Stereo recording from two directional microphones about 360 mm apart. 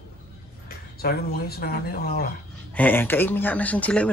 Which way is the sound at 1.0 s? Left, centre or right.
Left.